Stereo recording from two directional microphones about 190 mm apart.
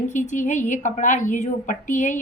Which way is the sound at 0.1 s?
40° left (ahead or behind).